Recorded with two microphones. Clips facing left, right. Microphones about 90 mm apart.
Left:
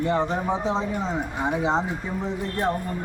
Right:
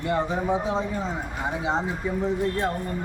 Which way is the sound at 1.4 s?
30° left (ahead or behind).